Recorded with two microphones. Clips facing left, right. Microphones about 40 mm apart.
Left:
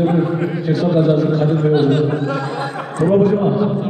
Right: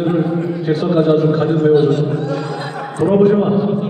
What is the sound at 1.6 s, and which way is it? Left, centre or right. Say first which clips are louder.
Speech: right 4 dB; left.